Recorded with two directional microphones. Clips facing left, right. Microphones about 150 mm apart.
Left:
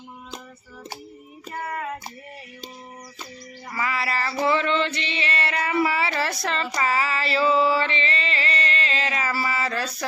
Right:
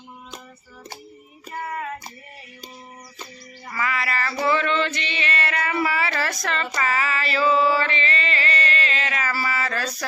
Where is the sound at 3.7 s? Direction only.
25° left (ahead or behind).